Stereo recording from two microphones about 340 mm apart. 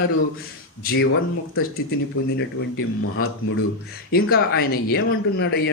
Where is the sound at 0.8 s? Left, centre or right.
Left.